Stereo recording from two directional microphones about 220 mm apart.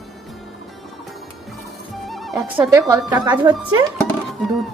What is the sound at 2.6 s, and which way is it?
Speech, 15° right (ahead or behind).